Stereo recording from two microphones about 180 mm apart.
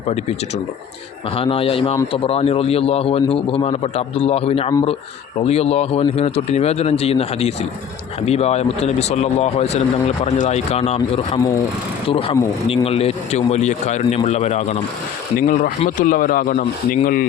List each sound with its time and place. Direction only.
0.0 s a man's voice: 35° left (ahead or behind)
15.4 s a man's voice: 50° left (ahead or behind)